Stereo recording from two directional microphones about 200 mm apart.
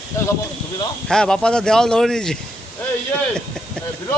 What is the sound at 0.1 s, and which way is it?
Speech, 15° left (ahead or behind).